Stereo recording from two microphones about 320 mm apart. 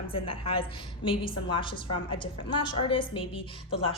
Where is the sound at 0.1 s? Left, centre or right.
Centre.